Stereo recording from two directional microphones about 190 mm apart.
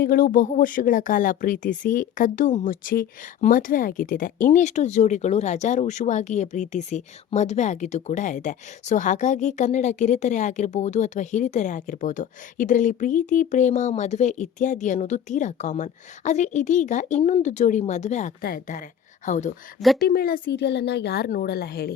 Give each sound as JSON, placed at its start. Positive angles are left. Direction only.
{"t": 0.0, "sound": "speech", "side_deg": 50}
{"t": 20.0, "sound": "speech", "side_deg": 50}
{"t": 20.5, "sound": "a woman's voice", "side_deg": 60}